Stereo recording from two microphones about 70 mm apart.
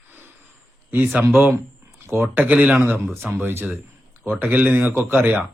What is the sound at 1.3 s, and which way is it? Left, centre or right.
Speech, right.